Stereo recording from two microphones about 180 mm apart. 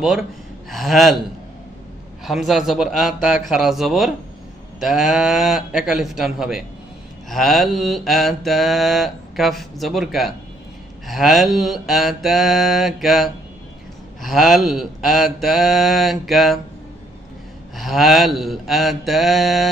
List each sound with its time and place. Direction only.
0.7 s mantra: centre (ahead or behind)
2.2 s mantra: centre (ahead or behind)
17.7 s mantra: centre (ahead or behind)